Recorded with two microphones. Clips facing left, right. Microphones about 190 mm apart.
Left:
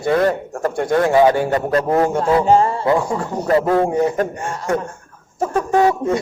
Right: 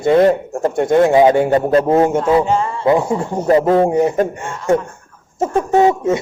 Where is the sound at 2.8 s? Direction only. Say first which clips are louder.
Right 3 dB; 20° right (ahead or behind).